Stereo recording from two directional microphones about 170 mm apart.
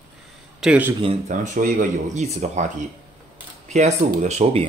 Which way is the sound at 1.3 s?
50° right (ahead or behind).